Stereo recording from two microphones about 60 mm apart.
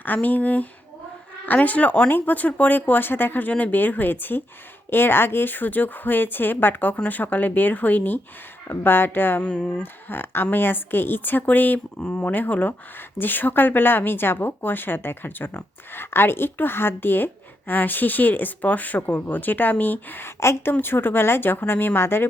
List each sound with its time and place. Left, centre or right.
0.0 s a woman's voice: left
9.4 s speech: centre
9.8 s a woman's voice: left